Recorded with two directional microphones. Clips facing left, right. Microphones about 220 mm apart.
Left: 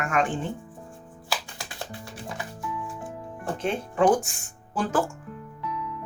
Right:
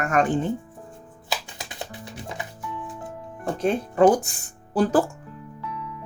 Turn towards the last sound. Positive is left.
turn(degrees=-35)  # may be behind; listen again after turning